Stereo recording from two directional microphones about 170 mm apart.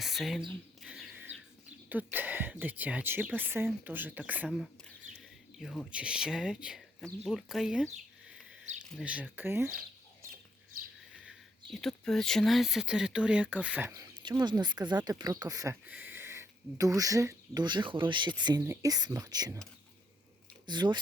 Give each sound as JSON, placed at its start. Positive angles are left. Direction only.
{"t": 0.0, "sound": "speech", "side_deg": 0}
{"t": 0.8, "sound": "a sound", "side_deg": 0}
{"t": 1.9, "sound": "speech", "side_deg": -10}
{"t": 8.9, "sound": "speech", "side_deg": -5}
{"t": 11.1, "sound": "speech", "side_deg": -5}
{"t": 13.9, "sound": "speech", "side_deg": -25}
{"t": 20.7, "sound": "speech", "side_deg": -25}